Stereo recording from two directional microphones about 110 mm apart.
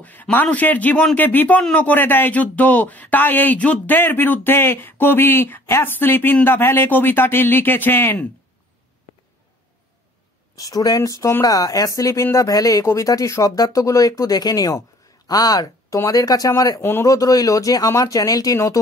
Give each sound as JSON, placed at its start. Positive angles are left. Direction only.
{"t": 0.0, "sound": "speech", "side_deg": 15}
{"t": 10.5, "sound": "speech", "side_deg": 35}
{"t": 16.8, "sound": "speech", "side_deg": 20}
{"t": 17.1, "sound": "speech", "side_deg": 30}